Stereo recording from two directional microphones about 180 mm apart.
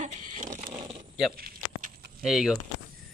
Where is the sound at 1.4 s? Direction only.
55° right (ahead or behind).